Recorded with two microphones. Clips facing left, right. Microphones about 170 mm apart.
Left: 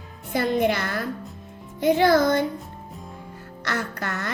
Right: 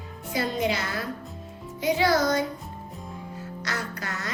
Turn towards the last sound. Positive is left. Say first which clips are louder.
# left 4 dB
turn(degrees=60)  # may be behind; listen again after turning